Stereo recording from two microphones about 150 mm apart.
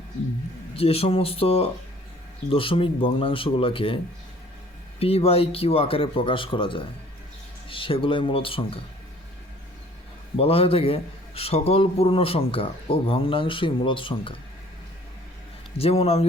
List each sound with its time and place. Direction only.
0.8 s a man's voice: 40° left (ahead or behind)
10.3 s a man's voice: 40° left (ahead or behind)
15.8 s speech: 45° left (ahead or behind)